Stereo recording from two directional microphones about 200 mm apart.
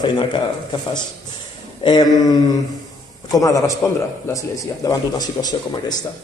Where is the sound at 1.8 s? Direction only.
20° left (ahead or behind).